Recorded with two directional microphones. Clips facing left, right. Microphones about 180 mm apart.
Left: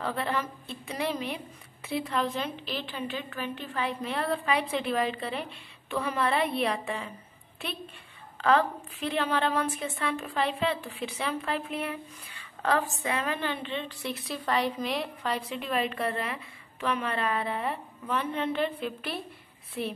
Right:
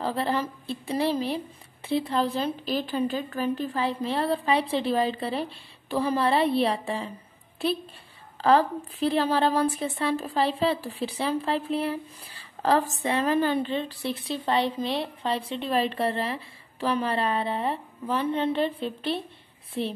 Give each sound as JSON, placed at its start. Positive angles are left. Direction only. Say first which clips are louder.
{"t": 0.0, "sound": "speech", "louder": "right 4 dB", "side_deg": -30}
{"t": 8.4, "sound": "a woman's voice", "louder": "right 4 dB", "side_deg": -35}